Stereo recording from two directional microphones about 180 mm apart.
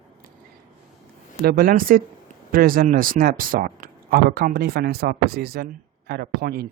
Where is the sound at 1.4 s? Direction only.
55° right (ahead or behind).